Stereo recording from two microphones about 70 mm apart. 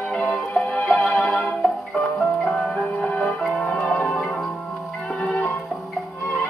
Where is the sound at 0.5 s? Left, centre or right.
Left.